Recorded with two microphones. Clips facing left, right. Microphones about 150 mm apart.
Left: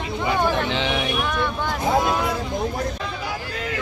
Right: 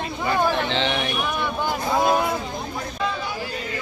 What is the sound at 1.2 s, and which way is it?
Vehicle, 10° right (ahead or behind).